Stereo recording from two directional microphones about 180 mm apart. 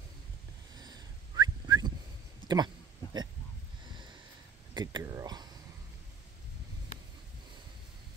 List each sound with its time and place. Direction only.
0.7 s whistling: 20° right (ahead or behind)
2.4 s a sound: 25° right (ahead or behind)
4.7 s speech: 20° right (ahead or behind)